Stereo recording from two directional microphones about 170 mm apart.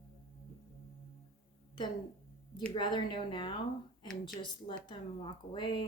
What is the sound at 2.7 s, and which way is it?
Speech, 25° left (ahead or behind).